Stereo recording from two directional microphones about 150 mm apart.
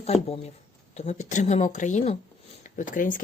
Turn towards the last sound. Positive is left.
turn(degrees=60)  # may be behind; listen again after turning